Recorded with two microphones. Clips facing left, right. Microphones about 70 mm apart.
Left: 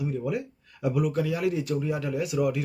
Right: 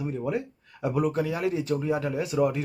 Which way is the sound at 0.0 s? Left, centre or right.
Right.